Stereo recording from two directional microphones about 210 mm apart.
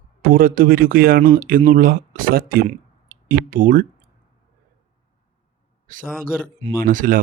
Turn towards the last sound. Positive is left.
turn(degrees=-40)  # may be behind; listen again after turning